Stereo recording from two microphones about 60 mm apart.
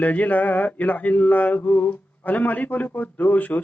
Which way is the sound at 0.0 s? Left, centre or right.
Left.